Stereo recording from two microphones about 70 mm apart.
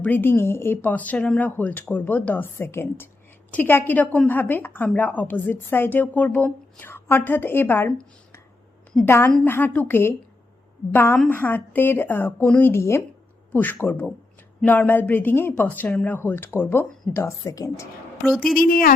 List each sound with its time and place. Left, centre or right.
0.0 s speech: left
0.8 s speech: left
9.0 s speech: left
14.6 s speech: left
17.4 s a woman's voice: left